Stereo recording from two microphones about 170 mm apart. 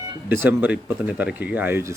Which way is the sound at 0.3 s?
10° right (ahead or behind).